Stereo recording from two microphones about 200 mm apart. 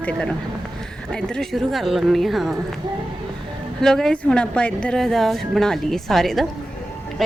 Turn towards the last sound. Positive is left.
turn(degrees=0)  # may be behind; listen again after turning